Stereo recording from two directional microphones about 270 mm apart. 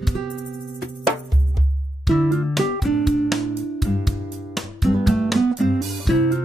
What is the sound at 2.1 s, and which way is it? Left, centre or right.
Music, centre.